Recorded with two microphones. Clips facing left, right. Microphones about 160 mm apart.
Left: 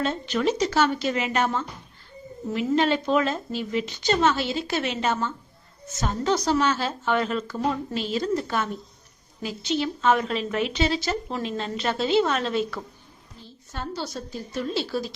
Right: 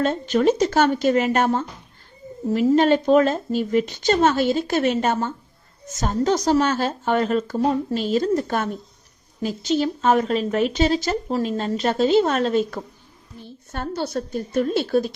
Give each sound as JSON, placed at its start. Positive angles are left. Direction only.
{"t": 0.0, "sound": "speech", "side_deg": -45}
{"t": 13.4, "sound": "a woman's voice", "side_deg": -55}